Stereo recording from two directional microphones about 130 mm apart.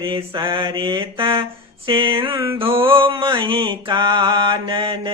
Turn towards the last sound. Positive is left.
turn(degrees=-40)  # may be behind; listen again after turning